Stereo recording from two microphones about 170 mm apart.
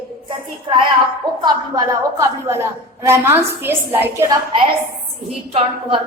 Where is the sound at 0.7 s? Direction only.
25° right (ahead or behind).